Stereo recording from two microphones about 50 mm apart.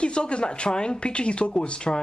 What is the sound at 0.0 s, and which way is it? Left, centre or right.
Speech, centre.